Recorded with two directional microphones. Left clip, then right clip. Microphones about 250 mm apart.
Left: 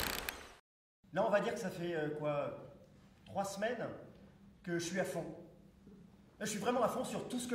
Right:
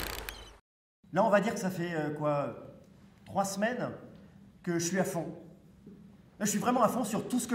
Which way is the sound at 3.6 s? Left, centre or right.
Right.